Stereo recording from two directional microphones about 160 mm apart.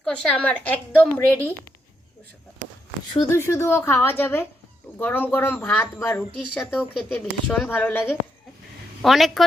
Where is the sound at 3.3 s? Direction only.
15° left (ahead or behind).